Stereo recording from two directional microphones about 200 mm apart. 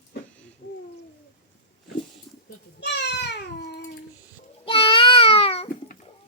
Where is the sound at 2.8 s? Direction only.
60° left (ahead or behind).